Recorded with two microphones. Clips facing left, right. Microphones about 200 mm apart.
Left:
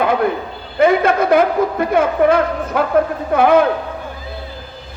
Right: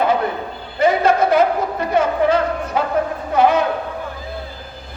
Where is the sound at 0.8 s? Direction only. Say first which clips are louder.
Left 2 dB; 55° left (ahead or behind).